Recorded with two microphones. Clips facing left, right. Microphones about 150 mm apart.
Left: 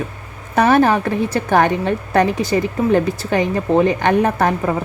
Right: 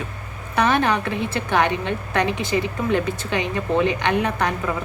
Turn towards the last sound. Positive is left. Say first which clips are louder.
# left 6 dB
turn(degrees=40)  # may be behind; listen again after turning